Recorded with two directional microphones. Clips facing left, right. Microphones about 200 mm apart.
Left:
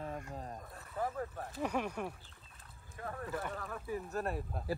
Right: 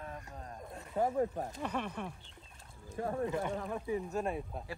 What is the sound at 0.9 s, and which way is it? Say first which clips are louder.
Speech: right 7 dB; 25° right (ahead or behind).